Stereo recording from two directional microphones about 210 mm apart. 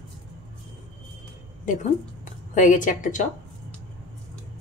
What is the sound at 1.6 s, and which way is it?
A woman's voice, 40° left (ahead or behind).